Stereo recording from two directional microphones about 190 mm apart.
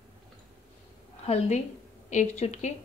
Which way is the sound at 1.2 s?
35° left (ahead or behind).